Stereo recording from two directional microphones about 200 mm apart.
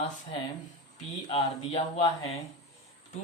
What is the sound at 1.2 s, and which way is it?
Speech, 25° left (ahead or behind).